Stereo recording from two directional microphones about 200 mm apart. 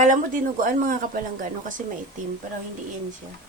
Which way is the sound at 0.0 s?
40° right (ahead or behind).